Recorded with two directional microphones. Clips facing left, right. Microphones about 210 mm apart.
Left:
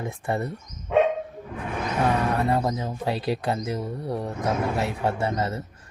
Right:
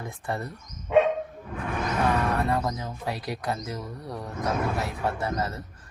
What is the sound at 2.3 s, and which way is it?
Speech, 30° left (ahead or behind).